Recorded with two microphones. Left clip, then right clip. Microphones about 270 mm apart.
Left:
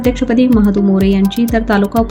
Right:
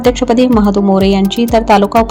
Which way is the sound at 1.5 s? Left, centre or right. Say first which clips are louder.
Right 7 dB; centre.